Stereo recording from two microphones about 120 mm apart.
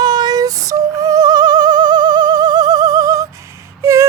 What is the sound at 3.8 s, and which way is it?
Wail, 25° right (ahead or behind).